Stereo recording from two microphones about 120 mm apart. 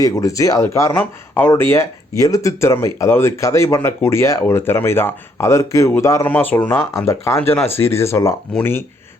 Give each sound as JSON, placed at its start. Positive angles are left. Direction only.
{"t": 0.0, "sound": "speech", "side_deg": 25}
{"t": 6.2, "sound": "speech", "side_deg": 15}